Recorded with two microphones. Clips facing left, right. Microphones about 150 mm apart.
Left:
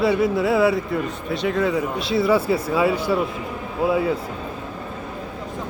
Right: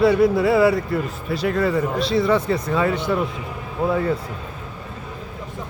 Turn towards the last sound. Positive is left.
turn(degrees=5)  # may be behind; listen again after turning